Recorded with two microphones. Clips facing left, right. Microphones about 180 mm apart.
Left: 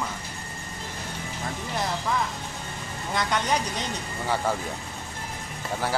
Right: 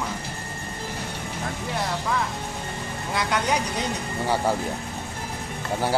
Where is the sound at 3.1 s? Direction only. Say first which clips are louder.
Right 1 dB; 5° right (ahead or behind).